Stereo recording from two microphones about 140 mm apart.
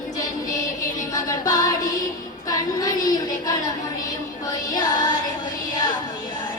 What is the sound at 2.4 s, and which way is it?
Child singing, 25° left (ahead or behind).